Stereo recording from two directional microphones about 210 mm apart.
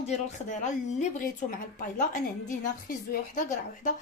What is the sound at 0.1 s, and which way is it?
Speech, 35° left (ahead or behind).